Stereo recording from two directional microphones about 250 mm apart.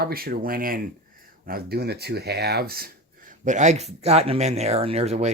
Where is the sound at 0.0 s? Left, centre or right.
Right.